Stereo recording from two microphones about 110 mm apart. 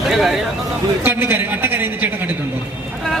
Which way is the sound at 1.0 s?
20° right (ahead or behind).